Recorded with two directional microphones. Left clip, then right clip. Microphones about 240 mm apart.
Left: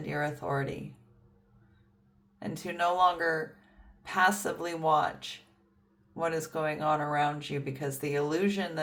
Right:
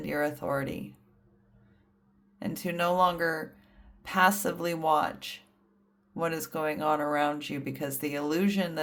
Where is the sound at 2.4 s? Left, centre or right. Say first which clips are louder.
Even; right.